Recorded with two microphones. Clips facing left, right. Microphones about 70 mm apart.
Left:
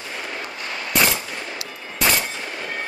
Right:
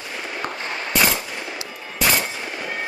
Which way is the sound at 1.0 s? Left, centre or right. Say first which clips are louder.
Right 1 dB; centre.